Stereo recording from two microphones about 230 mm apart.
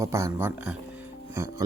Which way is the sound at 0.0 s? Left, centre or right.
Centre.